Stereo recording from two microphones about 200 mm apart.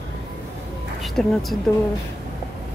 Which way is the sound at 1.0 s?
Centre (ahead or behind).